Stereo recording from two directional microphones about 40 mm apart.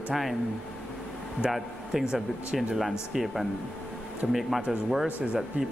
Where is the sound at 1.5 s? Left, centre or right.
Centre.